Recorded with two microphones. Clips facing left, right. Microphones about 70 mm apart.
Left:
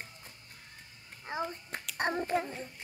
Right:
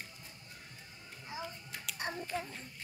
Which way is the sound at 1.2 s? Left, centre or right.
Left.